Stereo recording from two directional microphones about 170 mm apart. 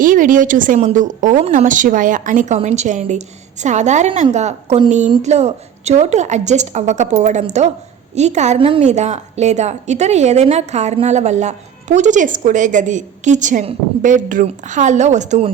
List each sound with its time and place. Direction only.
0.0 s a woman's voice: 50° right (ahead or behind)